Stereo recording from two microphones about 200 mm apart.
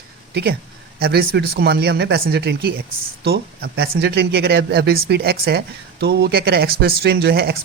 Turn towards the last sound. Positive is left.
turn(degrees=-55)  # may be behind; listen again after turning